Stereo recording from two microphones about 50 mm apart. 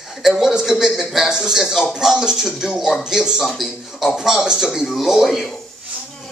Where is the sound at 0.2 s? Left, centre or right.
Centre.